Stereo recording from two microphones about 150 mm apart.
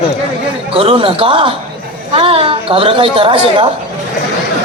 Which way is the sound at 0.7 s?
40° right (ahead or behind).